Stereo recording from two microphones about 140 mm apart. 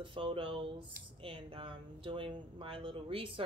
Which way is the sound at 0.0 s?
35° right (ahead or behind).